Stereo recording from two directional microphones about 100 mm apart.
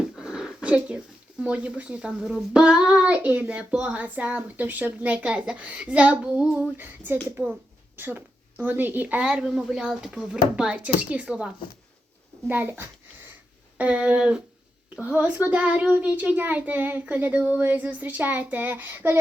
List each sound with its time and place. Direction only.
0.2 s a sound: 10° right (ahead or behind)
1.5 s a child's voice: 15° right (ahead or behind)
6.7 s a child's voice: 20° right (ahead or behind)
12.5 s a child's voice: 20° right (ahead or behind)